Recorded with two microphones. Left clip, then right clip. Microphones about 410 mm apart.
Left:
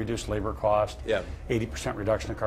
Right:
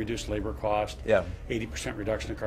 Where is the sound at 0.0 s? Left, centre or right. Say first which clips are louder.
Left 2 dB; centre.